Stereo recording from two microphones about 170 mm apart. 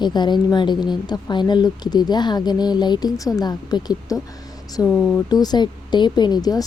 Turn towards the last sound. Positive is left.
turn(degrees=20)  # may be behind; listen again after turning